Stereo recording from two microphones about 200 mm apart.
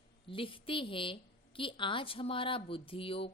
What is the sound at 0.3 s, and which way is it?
A woman's voice, 25° left (ahead or behind).